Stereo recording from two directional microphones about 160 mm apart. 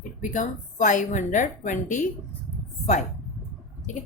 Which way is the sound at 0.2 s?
50° left (ahead or behind).